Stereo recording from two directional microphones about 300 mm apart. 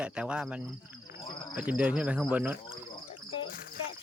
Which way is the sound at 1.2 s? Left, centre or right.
Centre.